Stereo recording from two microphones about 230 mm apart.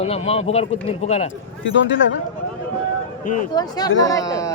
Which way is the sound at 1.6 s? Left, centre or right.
Left.